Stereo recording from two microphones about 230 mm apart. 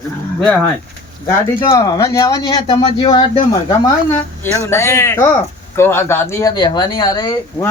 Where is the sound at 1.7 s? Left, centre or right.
Centre.